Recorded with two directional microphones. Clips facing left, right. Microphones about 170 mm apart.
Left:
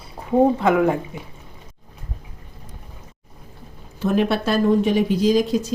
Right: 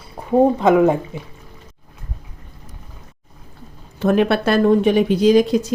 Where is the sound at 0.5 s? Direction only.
20° right (ahead or behind).